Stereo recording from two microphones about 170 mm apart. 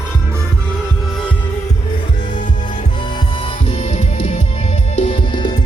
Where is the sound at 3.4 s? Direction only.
40° left (ahead or behind).